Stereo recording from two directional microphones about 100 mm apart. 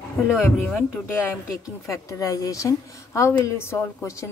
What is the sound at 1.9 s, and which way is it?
Speech, 30° left (ahead or behind).